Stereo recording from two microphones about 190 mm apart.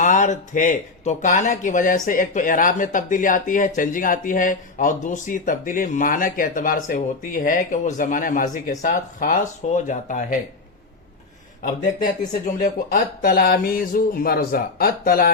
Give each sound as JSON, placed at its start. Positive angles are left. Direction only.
{"t": 0.0, "sound": "speech", "side_deg": 40}
{"t": 12.0, "sound": "speech", "side_deg": 45}